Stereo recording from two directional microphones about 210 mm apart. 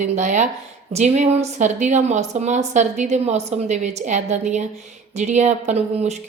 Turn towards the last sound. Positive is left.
turn(degrees=-30)  # may be behind; listen again after turning